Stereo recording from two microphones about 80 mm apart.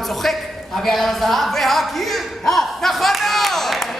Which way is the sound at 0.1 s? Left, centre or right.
Centre.